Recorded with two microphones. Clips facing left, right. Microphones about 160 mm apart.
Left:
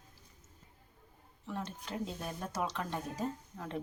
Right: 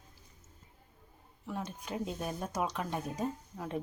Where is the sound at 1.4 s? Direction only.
10° right (ahead or behind).